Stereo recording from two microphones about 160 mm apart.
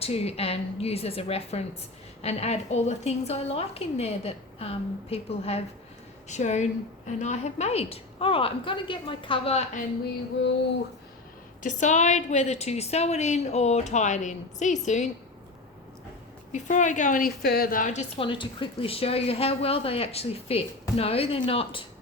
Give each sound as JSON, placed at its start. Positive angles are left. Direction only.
{"t": 0.0, "sound": "a woman's voice", "side_deg": 40}
{"t": 11.6, "sound": "a woman's voice", "side_deg": 50}
{"t": 16.5, "sound": "a woman's voice", "side_deg": 50}
{"t": 18.2, "sound": "speech", "side_deg": 30}